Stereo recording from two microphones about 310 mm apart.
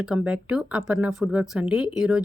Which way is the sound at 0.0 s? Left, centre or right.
Centre.